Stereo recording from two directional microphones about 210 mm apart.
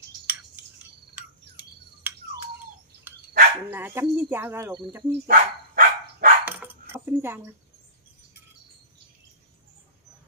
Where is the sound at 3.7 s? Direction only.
10° right (ahead or behind).